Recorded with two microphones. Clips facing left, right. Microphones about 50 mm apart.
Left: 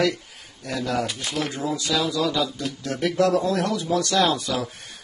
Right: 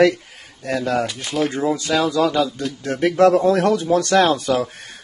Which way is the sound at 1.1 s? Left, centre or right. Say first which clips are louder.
Right 6 dB; centre.